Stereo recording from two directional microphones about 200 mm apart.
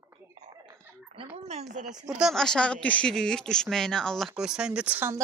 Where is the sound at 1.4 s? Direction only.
35° right (ahead or behind).